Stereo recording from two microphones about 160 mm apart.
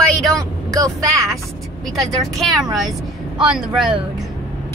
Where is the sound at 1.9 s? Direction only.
Centre (ahead or behind).